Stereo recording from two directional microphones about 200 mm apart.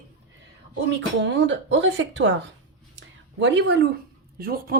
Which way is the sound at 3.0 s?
65° right (ahead or behind).